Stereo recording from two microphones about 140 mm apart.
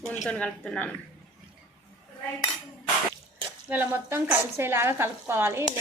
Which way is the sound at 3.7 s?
15° right (ahead or behind).